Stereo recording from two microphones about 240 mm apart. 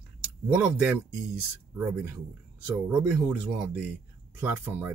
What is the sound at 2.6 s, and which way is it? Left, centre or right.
Speech, centre.